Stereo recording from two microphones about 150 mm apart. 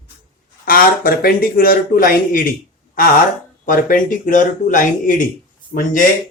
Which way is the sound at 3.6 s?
65° left (ahead or behind).